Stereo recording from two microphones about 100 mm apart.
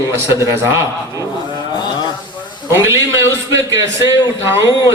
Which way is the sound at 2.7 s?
25° right (ahead or behind).